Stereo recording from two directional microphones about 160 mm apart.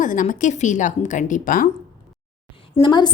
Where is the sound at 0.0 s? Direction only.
55° left (ahead or behind).